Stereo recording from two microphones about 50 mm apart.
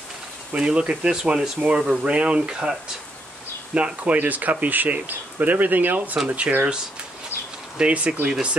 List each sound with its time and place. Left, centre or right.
0.5 s speech: right
3.7 s speech: right
7.7 s speech: right